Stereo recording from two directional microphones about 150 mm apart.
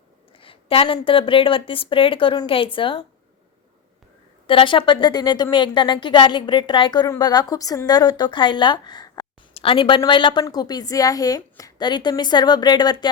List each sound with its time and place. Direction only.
0.3 s a sound: 35° left (ahead or behind)
0.9 s speech: 35° left (ahead or behind)
4.4 s a woman's voice: 35° left (ahead or behind)